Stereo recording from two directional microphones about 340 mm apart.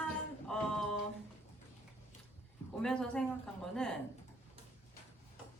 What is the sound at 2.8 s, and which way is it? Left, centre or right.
A woman's voice, centre.